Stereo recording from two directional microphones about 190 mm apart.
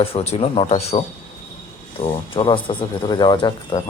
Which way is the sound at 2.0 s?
30° left (ahead or behind).